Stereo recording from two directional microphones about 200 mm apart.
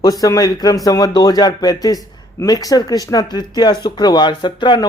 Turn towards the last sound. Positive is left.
turn(degrees=20)  # may be behind; listen again after turning